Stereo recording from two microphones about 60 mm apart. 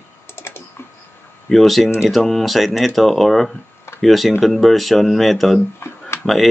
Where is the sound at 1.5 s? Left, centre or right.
Centre.